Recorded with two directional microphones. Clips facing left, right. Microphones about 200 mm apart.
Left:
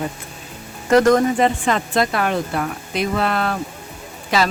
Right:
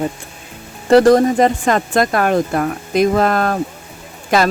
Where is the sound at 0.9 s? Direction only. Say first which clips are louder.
Right 4 dB; 35° right (ahead or behind).